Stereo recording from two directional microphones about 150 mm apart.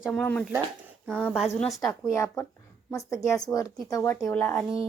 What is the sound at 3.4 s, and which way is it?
Speech, 25° left (ahead or behind).